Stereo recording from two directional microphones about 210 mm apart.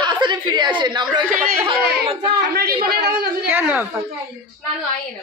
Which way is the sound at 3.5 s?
10° right (ahead or behind).